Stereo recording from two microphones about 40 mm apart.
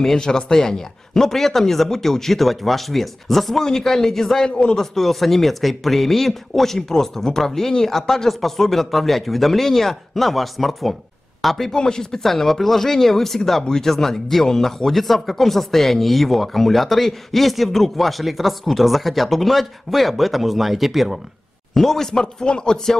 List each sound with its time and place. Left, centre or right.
0.0 s speech: centre
4.5 s speech: left
4.7 s speech: centre
11.7 s speech: centre
21.7 s speech: centre